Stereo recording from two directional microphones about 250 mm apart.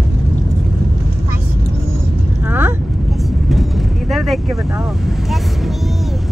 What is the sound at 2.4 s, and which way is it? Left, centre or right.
Speech, centre.